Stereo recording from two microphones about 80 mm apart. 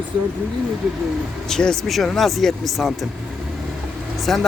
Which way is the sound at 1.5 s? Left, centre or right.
Centre.